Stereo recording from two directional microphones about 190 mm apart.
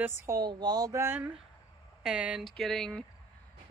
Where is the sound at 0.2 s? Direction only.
20° right (ahead or behind).